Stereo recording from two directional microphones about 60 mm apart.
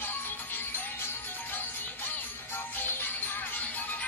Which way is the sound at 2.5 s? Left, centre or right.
Left.